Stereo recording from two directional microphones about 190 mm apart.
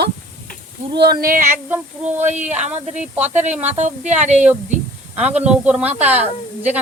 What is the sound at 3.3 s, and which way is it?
Speech, 35° right (ahead or behind).